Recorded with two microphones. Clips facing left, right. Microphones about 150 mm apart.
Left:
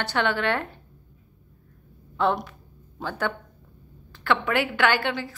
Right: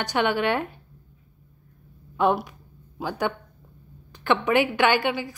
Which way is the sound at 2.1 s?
15° right (ahead or behind).